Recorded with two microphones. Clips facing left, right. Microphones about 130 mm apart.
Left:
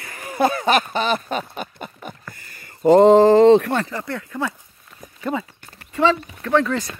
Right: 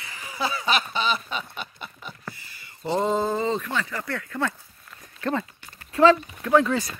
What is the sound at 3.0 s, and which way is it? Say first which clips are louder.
Speech: left 13 dB; 90° left.